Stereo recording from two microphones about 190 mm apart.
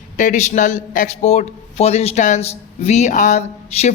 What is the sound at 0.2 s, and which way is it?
A man's voice, 40° left (ahead or behind).